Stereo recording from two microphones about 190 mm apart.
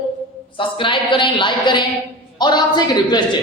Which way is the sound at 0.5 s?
25° left (ahead or behind).